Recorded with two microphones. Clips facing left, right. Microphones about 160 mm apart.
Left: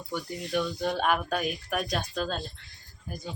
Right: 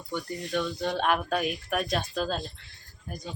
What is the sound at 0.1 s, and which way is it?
Speech, 10° left (ahead or behind).